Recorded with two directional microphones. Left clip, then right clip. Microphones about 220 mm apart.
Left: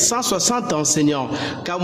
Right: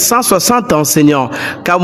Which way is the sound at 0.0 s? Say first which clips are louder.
Right 9 dB; 30° right (ahead or behind).